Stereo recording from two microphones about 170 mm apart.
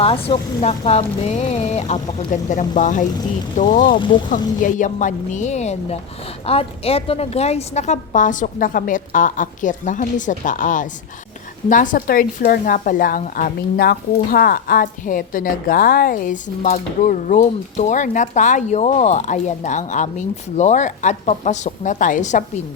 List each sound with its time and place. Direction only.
0.0 s speech: 35° left (ahead or behind)